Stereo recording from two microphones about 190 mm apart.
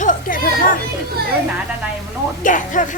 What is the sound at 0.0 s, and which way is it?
Children playing, 45° left (ahead or behind).